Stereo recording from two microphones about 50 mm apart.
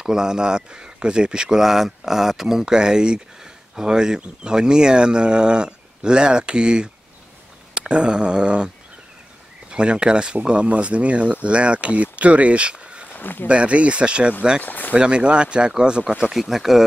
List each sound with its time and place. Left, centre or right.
0.0 s speech: centre
7.7 s a sound: centre
9.7 s speech: centre
13.1 s speech: left
13.5 s speech: right
14.6 s speech: left
15.0 s speech: right